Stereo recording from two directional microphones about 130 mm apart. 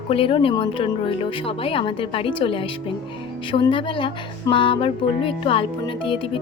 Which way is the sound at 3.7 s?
40° left (ahead or behind).